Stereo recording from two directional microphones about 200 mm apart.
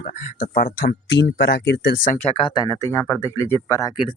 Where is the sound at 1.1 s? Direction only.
60° left (ahead or behind).